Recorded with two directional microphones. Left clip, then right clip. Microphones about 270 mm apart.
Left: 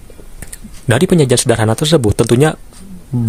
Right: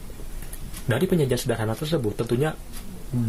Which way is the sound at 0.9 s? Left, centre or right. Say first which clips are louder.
Left 11 dB; left.